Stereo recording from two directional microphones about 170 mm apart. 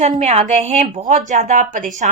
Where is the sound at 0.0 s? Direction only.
40° right (ahead or behind).